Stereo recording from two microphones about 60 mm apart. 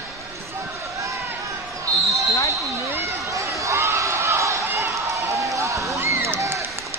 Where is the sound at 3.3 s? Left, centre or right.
Right.